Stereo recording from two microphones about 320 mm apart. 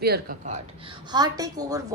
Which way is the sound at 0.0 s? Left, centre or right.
Right.